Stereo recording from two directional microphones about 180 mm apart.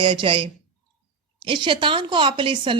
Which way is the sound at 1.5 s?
30° right (ahead or behind).